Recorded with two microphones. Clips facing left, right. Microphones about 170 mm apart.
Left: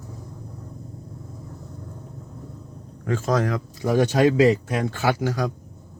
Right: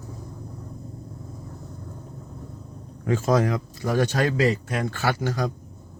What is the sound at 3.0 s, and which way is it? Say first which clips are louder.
Speech: right 1 dB; 10° right (ahead or behind).